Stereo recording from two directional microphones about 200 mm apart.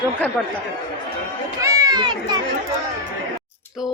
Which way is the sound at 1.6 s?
15° right (ahead or behind).